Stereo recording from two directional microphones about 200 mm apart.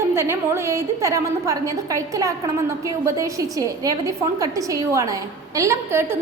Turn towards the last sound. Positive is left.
turn(degrees=-15)  # may be behind; listen again after turning